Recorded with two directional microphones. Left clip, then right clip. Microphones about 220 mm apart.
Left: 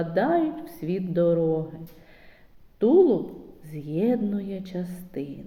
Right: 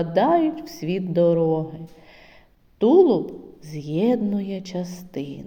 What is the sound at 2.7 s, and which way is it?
A woman's voice, 25° right (ahead or behind).